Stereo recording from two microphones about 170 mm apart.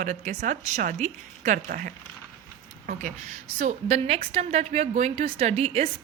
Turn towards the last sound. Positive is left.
turn(degrees=-35)  # may be behind; listen again after turning